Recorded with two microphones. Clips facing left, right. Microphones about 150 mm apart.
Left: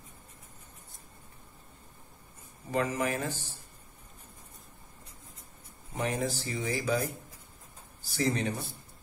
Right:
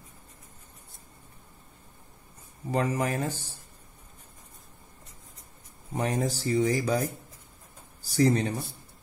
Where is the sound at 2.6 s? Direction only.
35° right (ahead or behind).